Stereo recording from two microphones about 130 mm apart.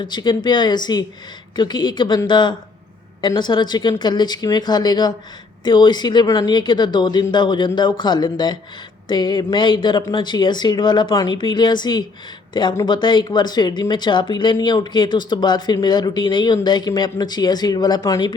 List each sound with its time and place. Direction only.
0.0 s speech: 35° left (ahead or behind)